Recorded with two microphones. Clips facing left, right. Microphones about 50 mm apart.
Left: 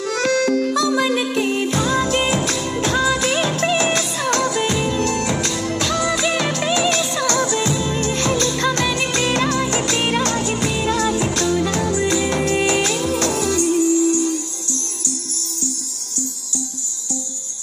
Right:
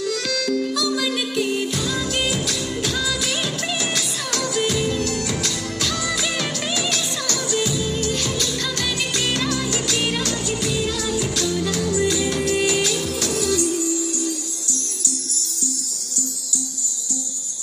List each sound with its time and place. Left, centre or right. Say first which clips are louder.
0.0 s music: left 6 dB; left
7.2 s music: left 3 dB; left
8.0 s music: left 5 dB; left